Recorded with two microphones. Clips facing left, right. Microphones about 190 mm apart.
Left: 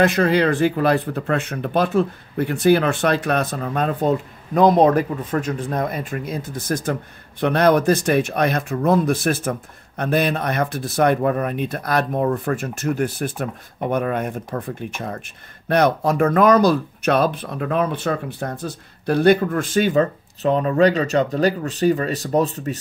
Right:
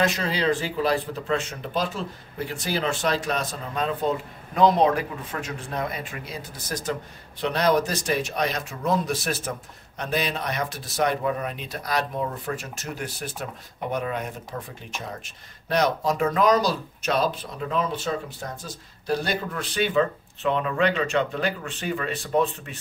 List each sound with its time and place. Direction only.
0.0 s speech: 60° left (ahead or behind); by 22.8 s 40° left (ahead or behind)